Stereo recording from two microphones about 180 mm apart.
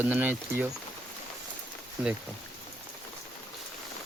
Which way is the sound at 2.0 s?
10° right (ahead or behind).